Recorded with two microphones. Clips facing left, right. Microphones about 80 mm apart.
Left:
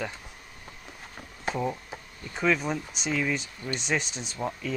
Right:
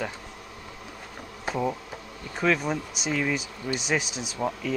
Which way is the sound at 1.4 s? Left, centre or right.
Centre.